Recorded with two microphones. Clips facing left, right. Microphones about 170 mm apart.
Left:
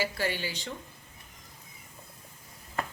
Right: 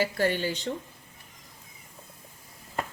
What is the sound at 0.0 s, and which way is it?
Speech, 50° right (ahead or behind).